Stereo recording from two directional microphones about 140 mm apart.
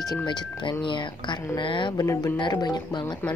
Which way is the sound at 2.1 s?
20° left (ahead or behind).